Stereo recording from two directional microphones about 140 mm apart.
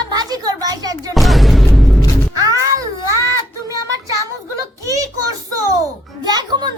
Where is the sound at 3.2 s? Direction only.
25° right (ahead or behind).